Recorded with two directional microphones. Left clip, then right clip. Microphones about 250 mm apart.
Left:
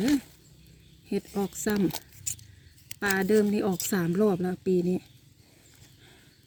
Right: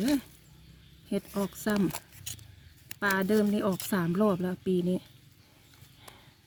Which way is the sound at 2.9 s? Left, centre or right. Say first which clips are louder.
Left 3 dB; centre.